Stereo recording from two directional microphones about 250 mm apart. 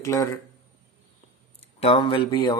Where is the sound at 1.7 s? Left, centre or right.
Left.